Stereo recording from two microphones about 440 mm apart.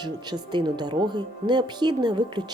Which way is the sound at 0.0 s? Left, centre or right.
Centre.